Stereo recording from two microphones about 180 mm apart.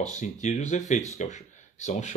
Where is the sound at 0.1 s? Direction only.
40° left (ahead or behind).